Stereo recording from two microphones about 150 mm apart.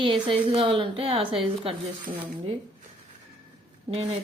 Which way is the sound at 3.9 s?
40° right (ahead or behind).